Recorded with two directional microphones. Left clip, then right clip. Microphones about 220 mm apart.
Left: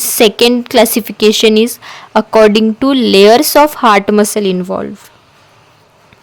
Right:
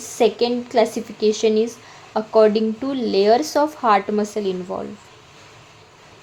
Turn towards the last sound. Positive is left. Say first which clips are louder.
# left 10 dB
turn(degrees=40)  # may be behind; listen again after turning